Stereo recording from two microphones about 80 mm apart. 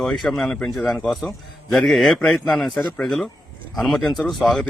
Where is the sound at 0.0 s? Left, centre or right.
Centre.